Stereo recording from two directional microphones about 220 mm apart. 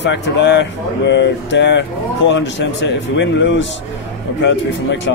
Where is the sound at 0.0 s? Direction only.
55° left (ahead or behind).